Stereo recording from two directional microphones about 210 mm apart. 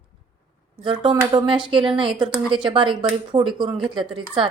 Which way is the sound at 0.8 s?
25° right (ahead or behind).